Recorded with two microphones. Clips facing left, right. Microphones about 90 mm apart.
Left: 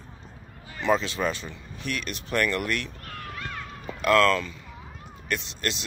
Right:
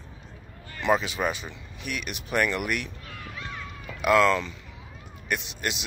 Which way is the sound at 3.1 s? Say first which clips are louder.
Left 2 dB; 55° left (ahead or behind).